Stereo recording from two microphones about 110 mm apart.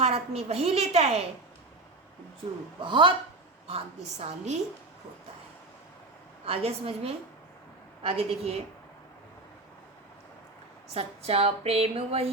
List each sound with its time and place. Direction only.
0.0 s a woman's voice: 70° right (ahead or behind)
2.8 s a man's voice: 45° right (ahead or behind)
3.7 s a woman's voice: 70° right (ahead or behind)
6.4 s speech: 65° right (ahead or behind)
10.9 s speech: 65° right (ahead or behind)